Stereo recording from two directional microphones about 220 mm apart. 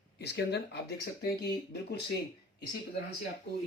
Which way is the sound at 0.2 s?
50° left (ahead or behind).